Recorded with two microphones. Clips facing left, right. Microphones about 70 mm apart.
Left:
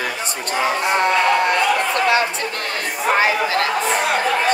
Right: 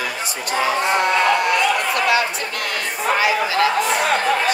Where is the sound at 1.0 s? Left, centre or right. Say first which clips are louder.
Left 3 dB; left.